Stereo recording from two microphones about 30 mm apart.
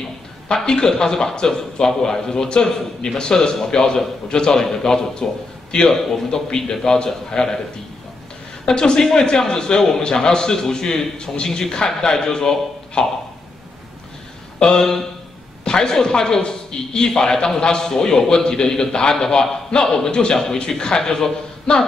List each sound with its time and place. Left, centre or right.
0.7 s a man's voice: left
5.9 s a man's voice: centre
6.5 s a man's voice: centre
8.6 s a man's voice: left
14.6 s a man's voice: left